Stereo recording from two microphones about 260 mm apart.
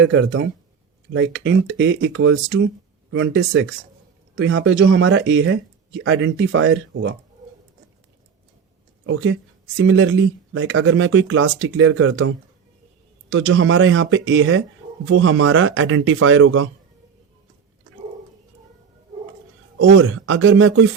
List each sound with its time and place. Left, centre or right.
0.0 s speech: right
9.0 s speech: right
13.3 s speech: right
19.8 s speech: right